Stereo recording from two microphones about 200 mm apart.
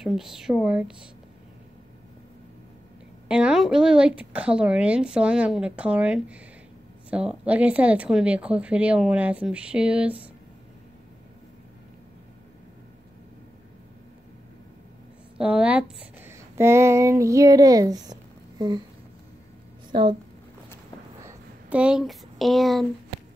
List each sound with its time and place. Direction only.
0.0 s a woman's voice: centre (ahead or behind)
3.3 s a woman's voice: 5° right (ahead or behind)
15.3 s speech: 5° right (ahead or behind); by 18.8 s 20° right (ahead or behind)
19.9 s speech: 25° right (ahead or behind)
21.2 s a sound: 10° right (ahead or behind)